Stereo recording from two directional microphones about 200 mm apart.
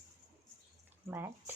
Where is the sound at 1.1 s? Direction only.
15° right (ahead or behind).